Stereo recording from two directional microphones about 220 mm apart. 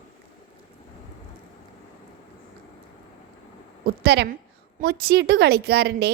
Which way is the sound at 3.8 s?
50° right (ahead or behind).